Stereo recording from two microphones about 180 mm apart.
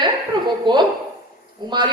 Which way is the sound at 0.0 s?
25° right (ahead or behind).